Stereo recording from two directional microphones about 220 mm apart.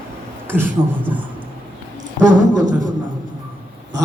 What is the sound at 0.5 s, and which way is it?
Speech, 10° right (ahead or behind).